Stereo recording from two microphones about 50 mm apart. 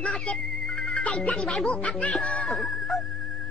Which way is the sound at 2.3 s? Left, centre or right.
Centre.